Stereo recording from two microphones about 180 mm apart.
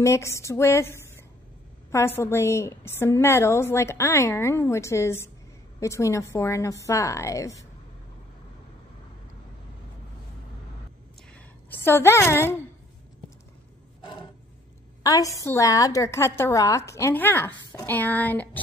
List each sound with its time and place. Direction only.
0.0 s a woman's voice: 15° left (ahead or behind)
11.3 s a woman's voice: 10° left (ahead or behind)
15.0 s a woman's voice: 20° left (ahead or behind)